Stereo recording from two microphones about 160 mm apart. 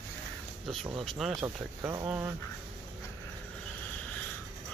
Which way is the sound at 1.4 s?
15° right (ahead or behind).